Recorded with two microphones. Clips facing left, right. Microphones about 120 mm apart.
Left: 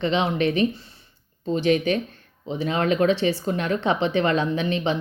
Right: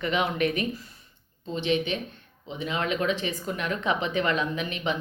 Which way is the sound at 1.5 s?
40° left (ahead or behind).